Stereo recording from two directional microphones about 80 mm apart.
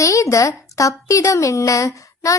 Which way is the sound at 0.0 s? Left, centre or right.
Left.